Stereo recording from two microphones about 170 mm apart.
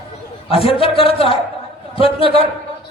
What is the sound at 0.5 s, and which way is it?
A man's voice, 35° left (ahead or behind).